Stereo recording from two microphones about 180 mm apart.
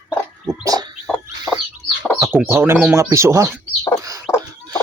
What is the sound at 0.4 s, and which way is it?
Bird, 20° right (ahead or behind).